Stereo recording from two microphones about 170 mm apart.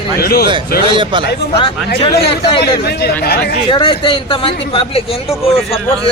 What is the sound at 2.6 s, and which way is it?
Speech, 70° left (ahead or behind).